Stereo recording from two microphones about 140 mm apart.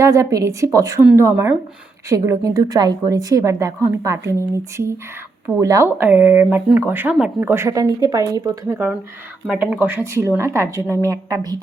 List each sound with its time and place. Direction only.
0.0 s a woman's voice: 25° right (ahead or behind)
6.0 s speech: 10° right (ahead or behind)
9.5 s a woman's voice: 10° right (ahead or behind); by 11.5 s 25° right (ahead or behind)